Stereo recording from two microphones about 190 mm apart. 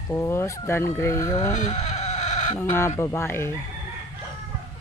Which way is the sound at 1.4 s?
35° left (ahead or behind).